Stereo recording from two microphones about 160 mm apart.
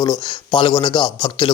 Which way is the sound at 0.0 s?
25° left (ahead or behind).